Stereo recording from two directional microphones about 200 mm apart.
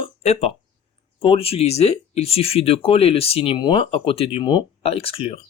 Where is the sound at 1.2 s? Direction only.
30° left (ahead or behind).